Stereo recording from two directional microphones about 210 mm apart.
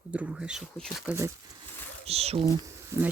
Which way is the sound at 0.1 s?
5° right (ahead or behind).